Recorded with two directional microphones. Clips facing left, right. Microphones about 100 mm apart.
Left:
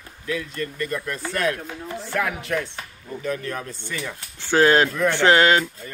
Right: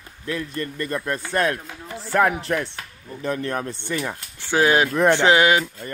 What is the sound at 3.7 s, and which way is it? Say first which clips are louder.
Speech: right 4 dB; 25° right (ahead or behind).